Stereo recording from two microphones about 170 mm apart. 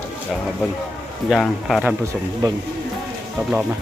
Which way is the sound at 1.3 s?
Centre (ahead or behind).